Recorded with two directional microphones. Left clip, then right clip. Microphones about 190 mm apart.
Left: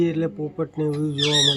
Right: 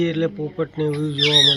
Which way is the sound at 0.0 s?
10° left (ahead or behind).